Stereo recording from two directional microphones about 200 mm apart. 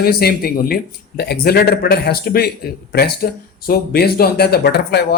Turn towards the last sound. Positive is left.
turn(degrees=55)  # may be behind; listen again after turning